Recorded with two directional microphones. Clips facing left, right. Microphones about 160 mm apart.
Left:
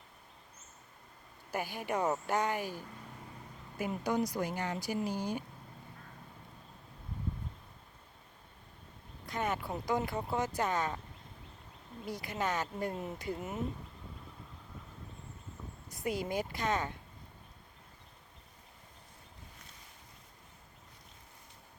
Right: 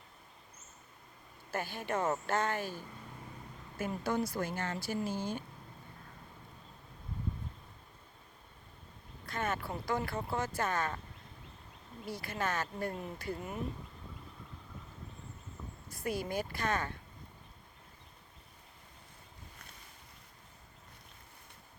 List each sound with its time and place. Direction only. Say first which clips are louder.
1.5 s speech: left 1 dB; 15° left (ahead or behind)
9.2 s speech: left 1 dB; 15° left (ahead or behind)
12.0 s speech: left 1 dB; 20° left (ahead or behind)
15.9 s speech: left 1 dB; 20° left (ahead or behind)